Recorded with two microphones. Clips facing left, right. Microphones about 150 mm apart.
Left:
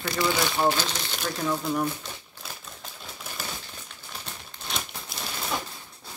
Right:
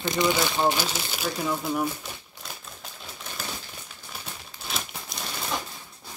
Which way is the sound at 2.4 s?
Centre (ahead or behind).